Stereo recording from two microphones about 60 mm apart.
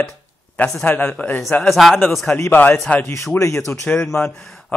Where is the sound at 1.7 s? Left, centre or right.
Centre.